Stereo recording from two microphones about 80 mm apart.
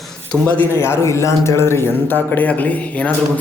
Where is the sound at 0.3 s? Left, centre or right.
Centre.